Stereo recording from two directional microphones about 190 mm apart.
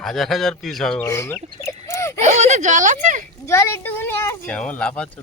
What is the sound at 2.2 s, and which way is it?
Speech, 35° right (ahead or behind).